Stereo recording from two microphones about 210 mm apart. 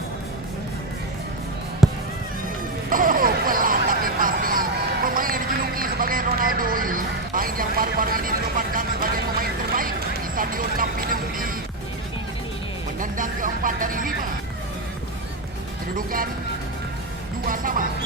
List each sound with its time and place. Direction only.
1.8 s a sound: centre (ahead or behind)
2.9 s a sound: 40° right (ahead or behind)
10.3 s speech: 40° right (ahead or behind)
13.0 s music: 40° right (ahead or behind)
16.0 s speech: 40° right (ahead or behind)
17.5 s speech: 40° right (ahead or behind)